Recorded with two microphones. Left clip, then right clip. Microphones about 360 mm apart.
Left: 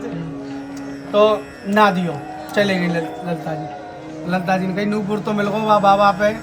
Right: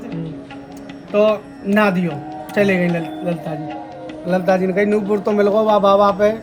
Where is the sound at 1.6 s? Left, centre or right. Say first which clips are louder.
Left 2 dB; left.